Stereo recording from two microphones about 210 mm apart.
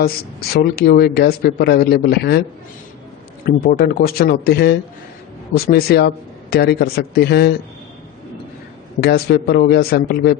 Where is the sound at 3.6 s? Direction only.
50° left (ahead or behind).